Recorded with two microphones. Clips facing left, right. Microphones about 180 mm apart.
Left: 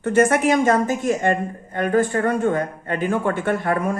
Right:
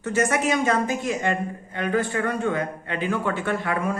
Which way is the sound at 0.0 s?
55° left (ahead or behind).